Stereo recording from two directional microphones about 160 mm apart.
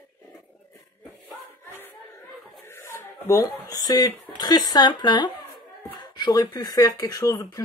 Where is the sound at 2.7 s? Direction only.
15° left (ahead or behind).